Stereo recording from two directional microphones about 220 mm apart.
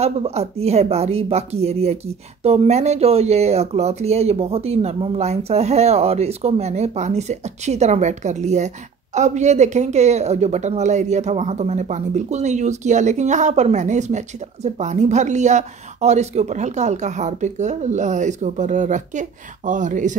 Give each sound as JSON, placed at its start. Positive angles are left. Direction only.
{"t": 0.0, "sound": "speech", "side_deg": -30}